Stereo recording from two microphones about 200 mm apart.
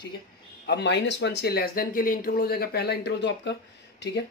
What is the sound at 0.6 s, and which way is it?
Speech, 60° left (ahead or behind).